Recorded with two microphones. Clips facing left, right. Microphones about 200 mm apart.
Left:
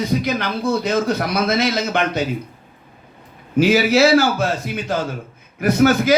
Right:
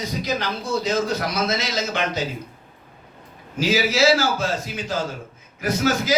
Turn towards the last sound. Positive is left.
turn(degrees=60)  # may be behind; listen again after turning